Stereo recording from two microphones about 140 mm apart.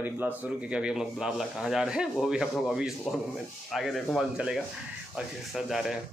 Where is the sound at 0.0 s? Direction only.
10° right (ahead or behind).